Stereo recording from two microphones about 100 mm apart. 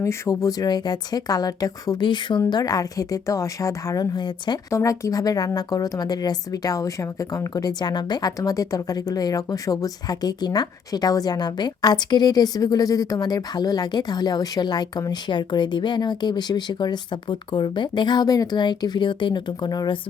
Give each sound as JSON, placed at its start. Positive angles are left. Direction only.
{"t": 0.0, "sound": "a woman's voice", "side_deg": 30}
{"t": 4.7, "sound": "a woman's voice", "side_deg": 30}